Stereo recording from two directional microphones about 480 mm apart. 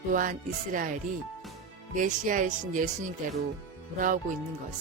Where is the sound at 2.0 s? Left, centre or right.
Centre.